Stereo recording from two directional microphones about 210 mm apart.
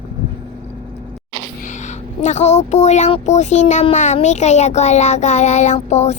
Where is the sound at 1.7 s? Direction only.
35° left (ahead or behind).